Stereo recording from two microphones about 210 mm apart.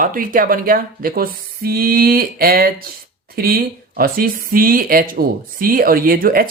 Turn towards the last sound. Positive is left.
turn(degrees=-45)  # may be behind; listen again after turning